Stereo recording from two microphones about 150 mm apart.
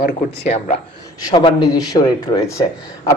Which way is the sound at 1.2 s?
30° left (ahead or behind).